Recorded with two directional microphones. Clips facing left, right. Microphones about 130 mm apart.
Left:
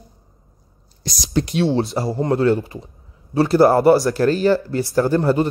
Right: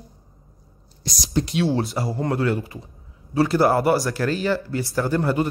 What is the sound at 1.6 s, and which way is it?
Speech, 25° left (ahead or behind).